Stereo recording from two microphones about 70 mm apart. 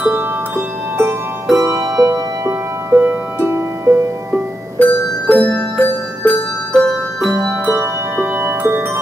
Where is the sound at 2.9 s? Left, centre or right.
Right.